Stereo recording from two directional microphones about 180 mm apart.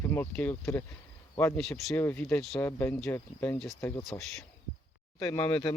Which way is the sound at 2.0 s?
15° left (ahead or behind).